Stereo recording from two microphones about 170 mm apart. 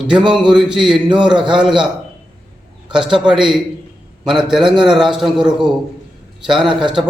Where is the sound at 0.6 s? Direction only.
5° right (ahead or behind).